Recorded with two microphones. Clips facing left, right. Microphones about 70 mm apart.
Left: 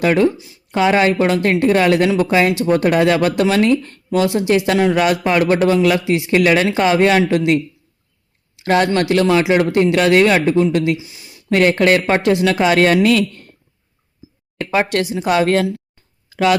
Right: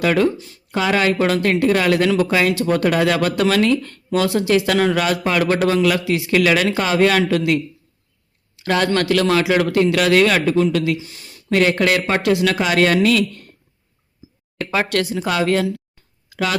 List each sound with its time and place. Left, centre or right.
0.0 s speech: left
0.3 s speech: centre
0.7 s speech: left
8.5 s a sound: left
8.9 s speech: left
10.9 s a sound: centre
11.5 s speech: left
14.6 s speech: left